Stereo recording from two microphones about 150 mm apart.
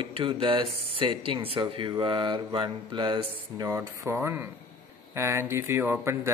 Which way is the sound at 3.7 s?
15° right (ahead or behind).